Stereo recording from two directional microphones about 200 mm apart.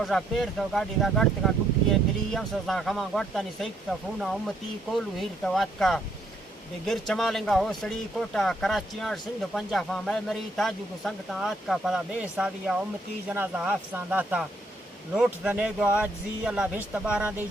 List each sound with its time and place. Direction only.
0.0 s speech: centre (ahead or behind)